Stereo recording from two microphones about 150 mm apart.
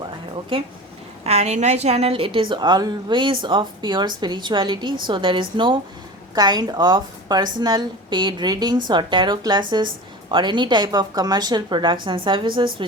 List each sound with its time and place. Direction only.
0.5 s a woman's voice: 35° right (ahead or behind)
1.2 s a woman's voice: 45° right (ahead or behind)